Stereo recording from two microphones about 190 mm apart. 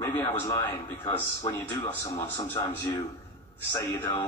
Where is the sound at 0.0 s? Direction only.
15° left (ahead or behind).